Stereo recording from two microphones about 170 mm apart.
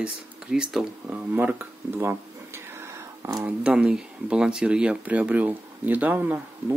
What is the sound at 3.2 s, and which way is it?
Speech, 15° right (ahead or behind).